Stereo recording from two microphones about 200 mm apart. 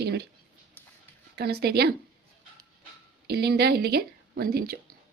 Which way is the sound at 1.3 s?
55° right (ahead or behind).